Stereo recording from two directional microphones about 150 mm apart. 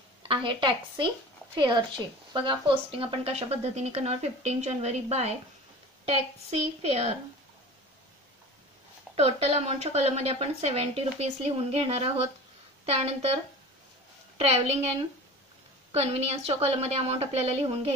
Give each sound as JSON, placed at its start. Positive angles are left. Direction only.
{"t": 0.2, "sound": "a woman's voice", "side_deg": -35}
{"t": 9.1, "sound": "speech", "side_deg": -40}
{"t": 14.4, "sound": "speech", "side_deg": -45}